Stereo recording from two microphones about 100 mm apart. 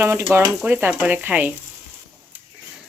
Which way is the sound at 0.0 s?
25° right (ahead or behind).